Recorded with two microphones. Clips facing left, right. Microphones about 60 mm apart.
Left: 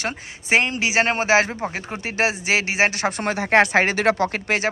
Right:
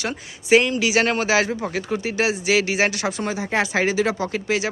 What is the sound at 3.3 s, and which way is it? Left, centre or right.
Speech, left.